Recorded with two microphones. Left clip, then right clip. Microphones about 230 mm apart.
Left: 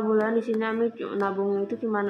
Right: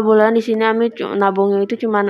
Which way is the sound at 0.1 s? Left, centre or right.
Right.